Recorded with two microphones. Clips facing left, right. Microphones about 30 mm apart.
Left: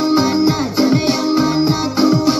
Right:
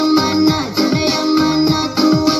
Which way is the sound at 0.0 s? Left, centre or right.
Right.